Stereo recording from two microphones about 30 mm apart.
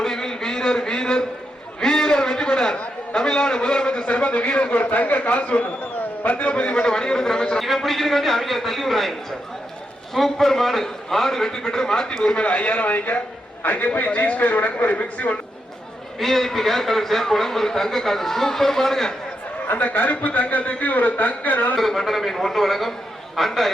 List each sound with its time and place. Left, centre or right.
0.0 s a sound: centre
4.1 s a man's voice: left
4.7 s a man's voice: left
6.5 s a man's voice: left
6.7 s a man's voice: left
7.9 s a man's voice: centre
10.2 s a man's voice: centre
12.4 s speech: left
12.8 s a man's voice: left
16.2 s a man's voice: centre
19.7 s a man's voice: left
21.8 s a man's voice: centre